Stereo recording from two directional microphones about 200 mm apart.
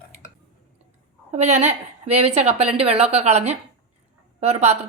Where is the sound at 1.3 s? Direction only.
35° right (ahead or behind).